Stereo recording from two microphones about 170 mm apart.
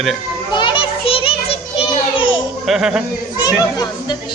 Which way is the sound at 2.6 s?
5° right (ahead or behind).